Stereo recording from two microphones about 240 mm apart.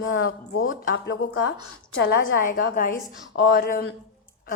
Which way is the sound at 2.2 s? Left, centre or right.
Left.